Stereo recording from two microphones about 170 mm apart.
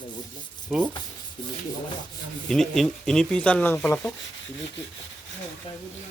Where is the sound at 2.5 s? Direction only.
Centre (ahead or behind).